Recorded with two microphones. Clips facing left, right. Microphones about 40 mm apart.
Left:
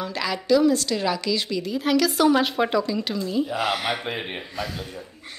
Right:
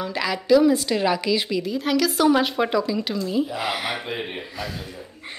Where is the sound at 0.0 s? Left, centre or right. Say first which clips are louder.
Right 2 dB; centre.